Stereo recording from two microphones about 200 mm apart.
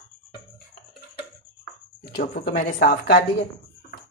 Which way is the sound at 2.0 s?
50° left (ahead or behind).